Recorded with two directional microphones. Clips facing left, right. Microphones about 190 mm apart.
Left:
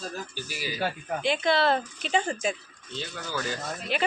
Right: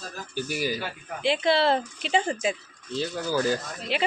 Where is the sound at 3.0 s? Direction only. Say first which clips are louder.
Right 8 dB; 35° right (ahead or behind).